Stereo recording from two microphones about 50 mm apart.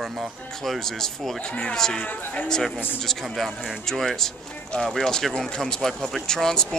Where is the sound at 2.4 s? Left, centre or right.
Centre.